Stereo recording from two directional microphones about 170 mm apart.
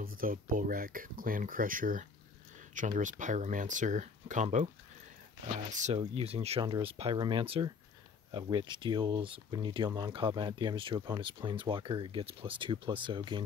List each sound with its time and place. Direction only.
0.0 s speech: 55° right (ahead or behind)
5.7 s speech: 45° right (ahead or behind); by 13.4 s 30° right (ahead or behind)